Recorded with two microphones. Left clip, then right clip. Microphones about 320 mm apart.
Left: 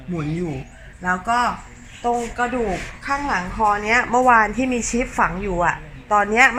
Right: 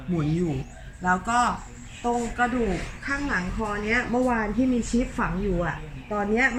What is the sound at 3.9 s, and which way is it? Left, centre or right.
Speech, left.